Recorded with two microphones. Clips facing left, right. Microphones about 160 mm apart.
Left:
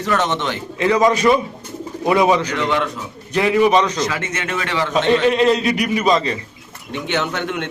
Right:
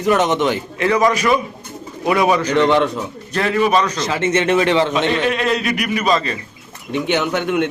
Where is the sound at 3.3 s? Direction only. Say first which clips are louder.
Left 2 dB; 15° left (ahead or behind).